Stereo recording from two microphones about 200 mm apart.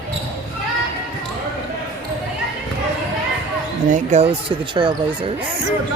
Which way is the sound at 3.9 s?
35° right (ahead or behind).